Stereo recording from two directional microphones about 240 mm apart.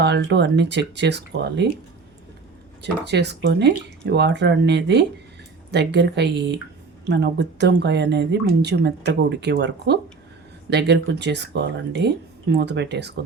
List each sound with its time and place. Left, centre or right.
0.0 s speech: right
2.8 s speech: right